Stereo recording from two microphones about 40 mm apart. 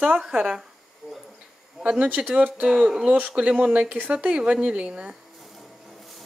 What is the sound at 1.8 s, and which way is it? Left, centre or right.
A woman's voice, right.